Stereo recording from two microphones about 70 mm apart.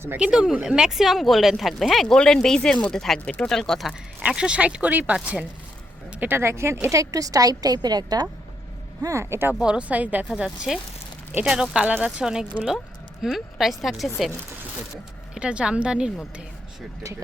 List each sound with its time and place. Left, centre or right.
0.2 s speech: centre
4.2 s speech: centre
6.3 s speech: right
6.9 s a woman's voice: right
9.0 s speech: right
9.6 s speech: centre
10.2 s speech: centre
15.4 s speech: centre